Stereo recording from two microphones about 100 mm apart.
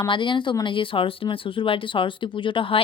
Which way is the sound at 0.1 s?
55° left (ahead or behind).